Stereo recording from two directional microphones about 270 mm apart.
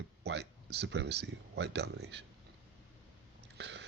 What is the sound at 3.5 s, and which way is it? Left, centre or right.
Chewing, right.